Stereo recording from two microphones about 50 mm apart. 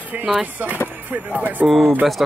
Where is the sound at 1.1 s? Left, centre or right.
Right.